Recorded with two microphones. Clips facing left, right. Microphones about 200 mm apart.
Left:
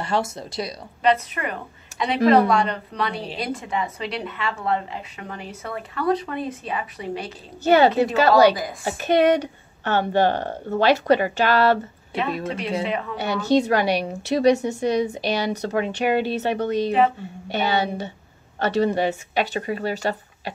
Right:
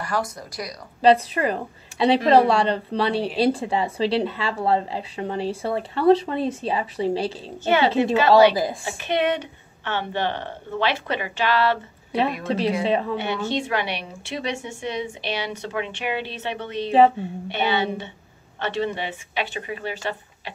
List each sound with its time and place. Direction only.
0.0 s speech: 25° left (ahead or behind)
1.0 s a woman's voice: 30° right (ahead or behind)
7.6 s a woman's voice: 40° left (ahead or behind)
12.4 s a woman's voice: 30° right (ahead or behind)
13.2 s a woman's voice: 40° left (ahead or behind)